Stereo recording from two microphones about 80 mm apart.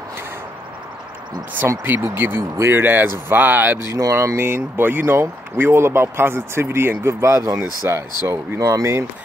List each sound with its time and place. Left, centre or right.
1.8 s speech: right
8.5 s speech: right